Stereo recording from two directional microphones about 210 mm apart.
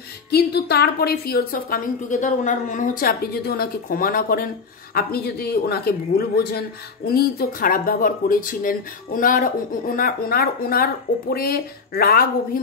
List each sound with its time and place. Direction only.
0.3 s speech: 50° left (ahead or behind)